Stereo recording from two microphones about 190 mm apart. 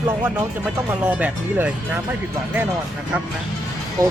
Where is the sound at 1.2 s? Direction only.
5° right (ahead or behind).